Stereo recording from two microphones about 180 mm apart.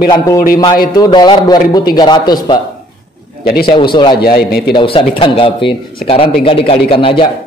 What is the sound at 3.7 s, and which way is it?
Speech, 25° left (ahead or behind).